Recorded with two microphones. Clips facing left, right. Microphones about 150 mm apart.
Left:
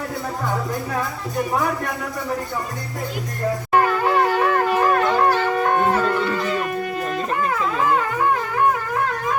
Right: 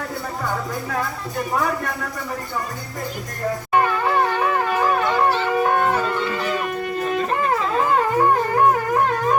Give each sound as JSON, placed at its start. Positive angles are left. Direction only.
{"t": 4.0, "sound": "shofar", "side_deg": 5}
{"t": 5.5, "sound": "music", "side_deg": -5}
{"t": 8.2, "sound": "wind instrument", "side_deg": -45}